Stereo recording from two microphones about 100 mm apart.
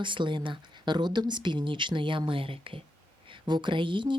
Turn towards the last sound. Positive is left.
turn(degrees=-55)  # may be behind; listen again after turning